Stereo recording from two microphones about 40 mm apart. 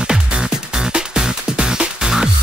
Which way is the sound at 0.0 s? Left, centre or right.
Centre.